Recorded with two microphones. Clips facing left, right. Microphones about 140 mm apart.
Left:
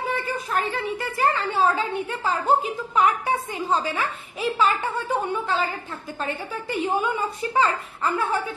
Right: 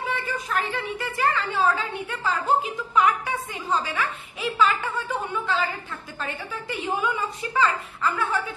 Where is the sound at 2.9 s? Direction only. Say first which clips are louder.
Left 1 dB; 35° left (ahead or behind).